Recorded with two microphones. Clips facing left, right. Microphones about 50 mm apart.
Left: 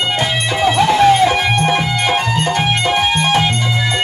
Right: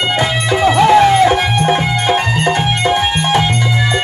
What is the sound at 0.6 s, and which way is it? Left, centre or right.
Music, right.